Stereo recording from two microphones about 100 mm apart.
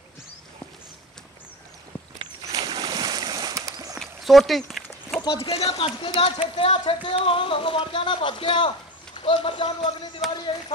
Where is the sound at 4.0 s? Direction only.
Centre (ahead or behind).